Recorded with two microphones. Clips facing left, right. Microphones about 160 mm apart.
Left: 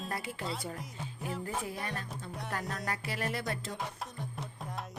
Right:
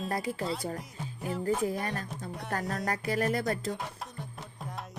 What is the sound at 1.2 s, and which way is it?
Music, centre (ahead or behind).